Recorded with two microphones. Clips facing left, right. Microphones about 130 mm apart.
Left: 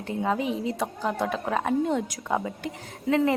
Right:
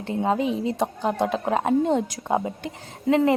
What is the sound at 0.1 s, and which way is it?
A woman's voice, 30° right (ahead or behind).